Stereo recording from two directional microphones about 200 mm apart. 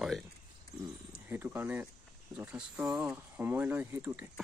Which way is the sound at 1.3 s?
10° right (ahead or behind).